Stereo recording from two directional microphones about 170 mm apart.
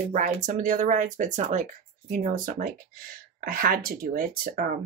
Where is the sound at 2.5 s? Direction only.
55° right (ahead or behind).